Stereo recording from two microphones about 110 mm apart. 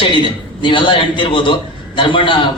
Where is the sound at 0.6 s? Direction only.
50° left (ahead or behind).